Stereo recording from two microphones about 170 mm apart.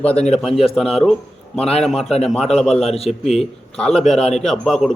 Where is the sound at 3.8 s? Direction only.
5° left (ahead or behind).